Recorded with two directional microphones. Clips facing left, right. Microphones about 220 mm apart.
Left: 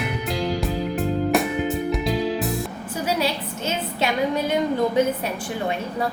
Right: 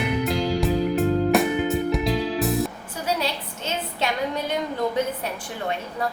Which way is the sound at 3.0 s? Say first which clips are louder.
Left 2 dB; 5° left (ahead or behind).